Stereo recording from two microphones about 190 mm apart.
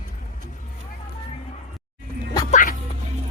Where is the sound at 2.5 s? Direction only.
45° left (ahead or behind).